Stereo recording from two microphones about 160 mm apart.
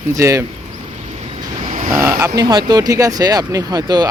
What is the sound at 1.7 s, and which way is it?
Vehicle, 55° right (ahead or behind).